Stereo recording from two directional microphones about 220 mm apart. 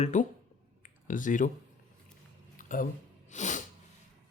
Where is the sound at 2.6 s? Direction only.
40° left (ahead or behind).